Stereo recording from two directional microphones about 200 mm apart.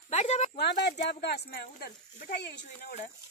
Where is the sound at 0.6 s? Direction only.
55° left (ahead or behind).